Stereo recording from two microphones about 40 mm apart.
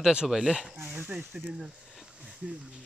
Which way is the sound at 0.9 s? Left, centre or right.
Right.